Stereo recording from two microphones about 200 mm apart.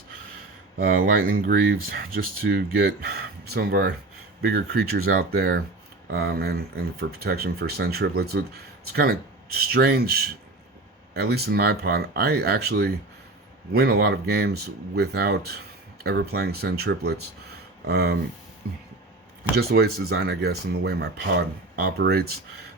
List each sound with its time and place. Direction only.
0.8 s speech: 50° right (ahead or behind)
19.5 s speech: 50° right (ahead or behind)